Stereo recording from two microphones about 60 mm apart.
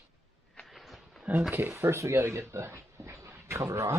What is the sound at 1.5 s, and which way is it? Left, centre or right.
Speech, right.